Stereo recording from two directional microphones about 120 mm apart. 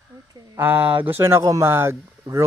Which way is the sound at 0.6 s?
15° right (ahead or behind).